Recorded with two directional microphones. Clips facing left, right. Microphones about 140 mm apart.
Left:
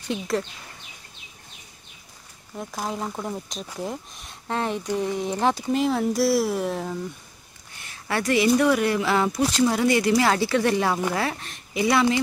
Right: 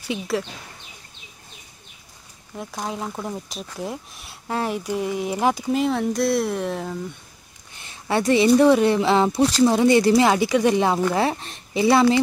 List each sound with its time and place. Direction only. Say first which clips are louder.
0.0 s speech: right 1 dB; 5° right (ahead or behind)
2.5 s speech: even; centre (ahead or behind)
5.8 s speech: right 1 dB; centre (ahead or behind)
7.8 s a sound: right 5 dB; 25° right (ahead or behind)
8.5 s speech: right 5 dB; 25° right (ahead or behind)